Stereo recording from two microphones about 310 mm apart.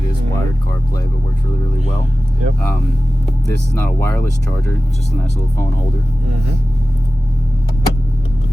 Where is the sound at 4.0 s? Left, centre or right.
Centre.